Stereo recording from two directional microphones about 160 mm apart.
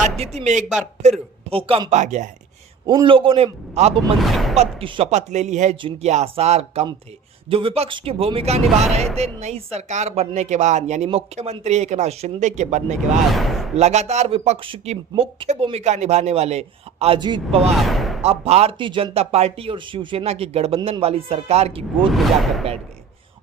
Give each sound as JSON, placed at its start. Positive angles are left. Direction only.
{"t": 0.2, "sound": "a woman's voice", "side_deg": -45}
{"t": 2.8, "sound": "speech", "side_deg": -25}
{"t": 4.2, "sound": "speech", "side_deg": 0}
{"t": 4.5, "sound": "a woman's voice", "side_deg": -40}
{"t": 13.3, "sound": "speech", "side_deg": 0}
{"t": 13.7, "sound": "a woman's voice", "side_deg": -45}
{"t": 17.2, "sound": "speech", "side_deg": -30}
{"t": 17.7, "sound": "speech", "side_deg": 0}
{"t": 18.2, "sound": "speech", "side_deg": -40}
{"t": 22.1, "sound": "speech", "side_deg": 0}